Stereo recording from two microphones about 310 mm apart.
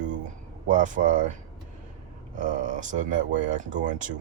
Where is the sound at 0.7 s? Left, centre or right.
Right.